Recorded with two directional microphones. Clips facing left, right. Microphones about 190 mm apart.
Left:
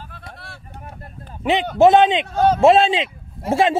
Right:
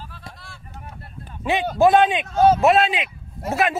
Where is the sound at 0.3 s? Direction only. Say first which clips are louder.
Left 4 dB; 60° left (ahead or behind).